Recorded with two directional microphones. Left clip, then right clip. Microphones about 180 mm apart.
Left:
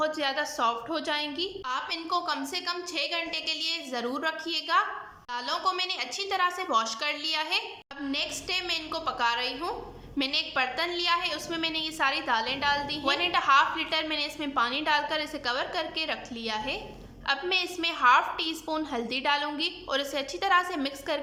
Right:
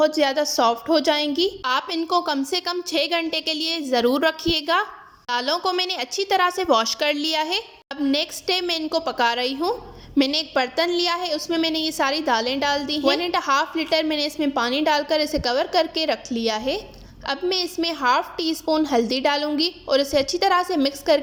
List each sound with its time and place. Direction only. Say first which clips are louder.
0.0 s a woman's voice: right 9 dB; 35° right (ahead or behind)